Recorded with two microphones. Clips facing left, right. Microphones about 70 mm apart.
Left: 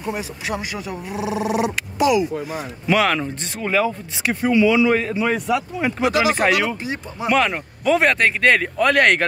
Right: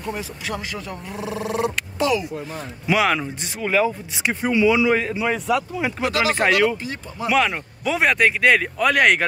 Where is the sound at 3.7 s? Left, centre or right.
Centre.